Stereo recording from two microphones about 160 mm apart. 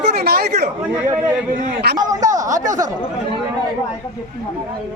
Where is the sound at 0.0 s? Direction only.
75° right (ahead or behind).